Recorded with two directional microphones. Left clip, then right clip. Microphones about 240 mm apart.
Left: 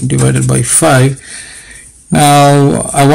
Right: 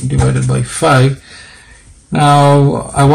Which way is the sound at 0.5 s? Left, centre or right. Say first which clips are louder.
Left 2 dB; left.